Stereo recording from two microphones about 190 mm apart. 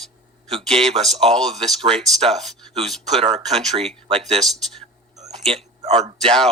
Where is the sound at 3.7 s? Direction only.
30° right (ahead or behind).